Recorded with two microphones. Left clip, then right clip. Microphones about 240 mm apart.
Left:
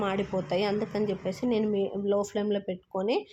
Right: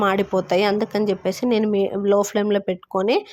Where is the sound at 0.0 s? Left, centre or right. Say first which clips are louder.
Right 10 dB; right.